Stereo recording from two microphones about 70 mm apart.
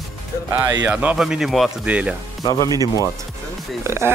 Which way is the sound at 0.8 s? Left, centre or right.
Right.